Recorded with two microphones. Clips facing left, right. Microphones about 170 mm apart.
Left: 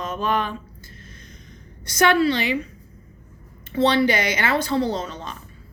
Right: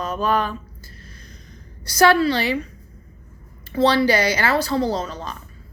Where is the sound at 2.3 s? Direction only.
35° right (ahead or behind).